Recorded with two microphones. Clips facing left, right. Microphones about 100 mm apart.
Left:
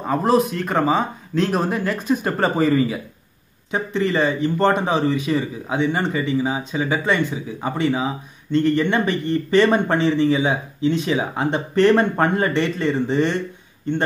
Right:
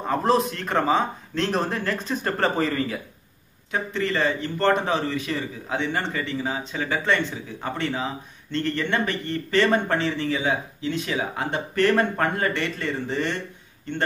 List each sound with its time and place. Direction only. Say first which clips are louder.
0.0 s speech: left 3 dB; 5° left (ahead or behind)